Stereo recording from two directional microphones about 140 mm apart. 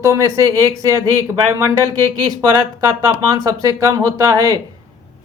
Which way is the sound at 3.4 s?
25° right (ahead or behind).